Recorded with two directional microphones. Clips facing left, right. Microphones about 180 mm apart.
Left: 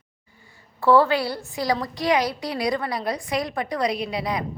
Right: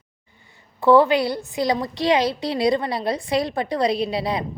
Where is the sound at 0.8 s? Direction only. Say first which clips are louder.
Right 3 dB; 20° right (ahead or behind).